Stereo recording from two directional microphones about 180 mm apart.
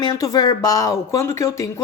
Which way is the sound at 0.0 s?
20° left (ahead or behind).